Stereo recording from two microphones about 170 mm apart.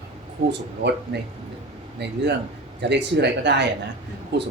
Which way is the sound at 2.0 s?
90° right.